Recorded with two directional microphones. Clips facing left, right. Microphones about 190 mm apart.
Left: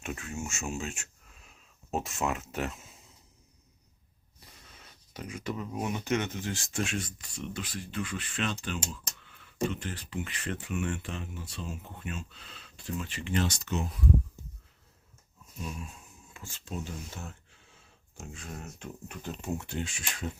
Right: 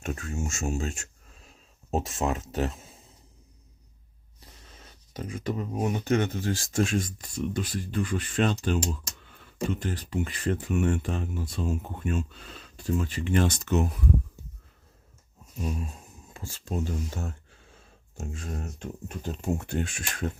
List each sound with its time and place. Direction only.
0.0 s speech: 40° right (ahead or behind)
4.8 s speech: 45° right (ahead or behind); by 13.8 s 60° right (ahead or behind)
15.6 s a sound: 40° right (ahead or behind)
16.6 s speech: 40° right (ahead or behind)